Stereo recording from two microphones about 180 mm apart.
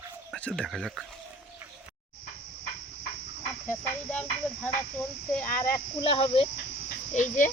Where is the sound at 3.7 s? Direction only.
10° left (ahead or behind).